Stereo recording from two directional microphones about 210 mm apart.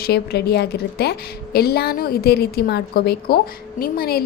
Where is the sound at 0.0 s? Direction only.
50° left (ahead or behind).